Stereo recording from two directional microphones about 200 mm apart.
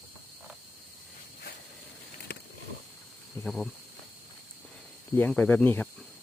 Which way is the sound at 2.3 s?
55° left (ahead or behind).